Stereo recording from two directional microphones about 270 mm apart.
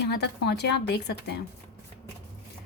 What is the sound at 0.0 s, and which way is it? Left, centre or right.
A woman's voice, left.